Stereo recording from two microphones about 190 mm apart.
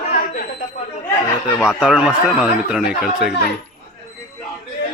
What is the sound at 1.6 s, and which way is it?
A man's voice, centre (ahead or behind).